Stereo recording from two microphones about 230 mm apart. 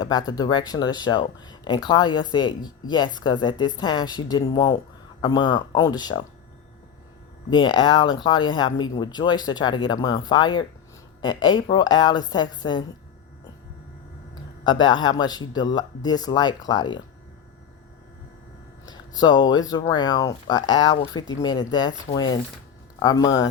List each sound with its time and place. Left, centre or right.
0.0 s speech: centre
7.5 s speech: left
14.6 s speech: centre
18.9 s speech: centre